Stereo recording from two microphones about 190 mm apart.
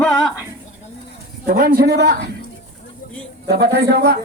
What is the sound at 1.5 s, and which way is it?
Speech, 50° right (ahead or behind).